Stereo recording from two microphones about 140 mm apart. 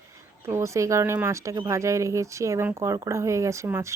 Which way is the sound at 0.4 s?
20° right (ahead or behind).